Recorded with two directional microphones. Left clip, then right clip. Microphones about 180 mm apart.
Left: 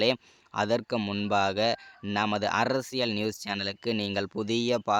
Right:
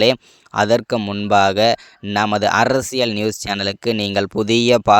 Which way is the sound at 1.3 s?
45° right (ahead or behind).